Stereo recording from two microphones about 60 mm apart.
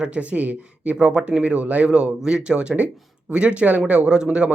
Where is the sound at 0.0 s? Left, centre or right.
Centre.